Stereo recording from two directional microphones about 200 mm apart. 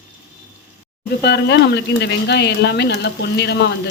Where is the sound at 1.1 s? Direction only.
55° left (ahead or behind).